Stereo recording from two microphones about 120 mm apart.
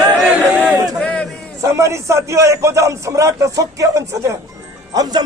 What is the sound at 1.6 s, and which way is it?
A man's voice, 25° right (ahead or behind).